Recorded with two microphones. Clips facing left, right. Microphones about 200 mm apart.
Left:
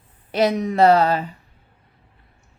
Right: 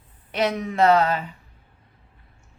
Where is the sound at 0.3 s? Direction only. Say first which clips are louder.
Left 5 dB; 35° left (ahead or behind).